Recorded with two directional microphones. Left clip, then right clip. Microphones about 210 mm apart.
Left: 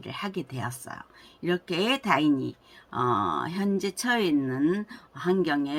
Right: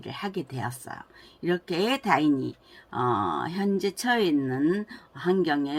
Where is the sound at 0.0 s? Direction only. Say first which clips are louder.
Right 1 dB; 10° left (ahead or behind).